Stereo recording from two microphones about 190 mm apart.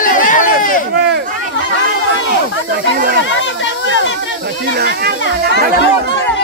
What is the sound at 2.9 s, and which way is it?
Snake, 50° right (ahead or behind).